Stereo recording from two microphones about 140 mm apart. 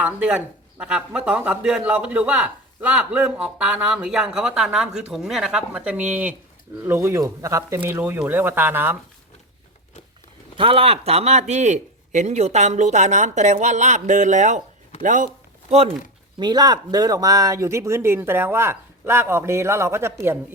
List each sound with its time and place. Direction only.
0.0 s speech: 10° right (ahead or behind)
10.6 s speech: 40° right (ahead or behind); by 15.3 s 65° right (ahead or behind)
16.4 s speech: 30° right (ahead or behind)